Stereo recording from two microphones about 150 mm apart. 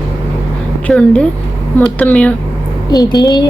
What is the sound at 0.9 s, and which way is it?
A woman's voice, 5° left (ahead or behind).